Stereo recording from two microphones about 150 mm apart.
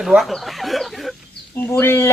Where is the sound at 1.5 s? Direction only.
15° left (ahead or behind).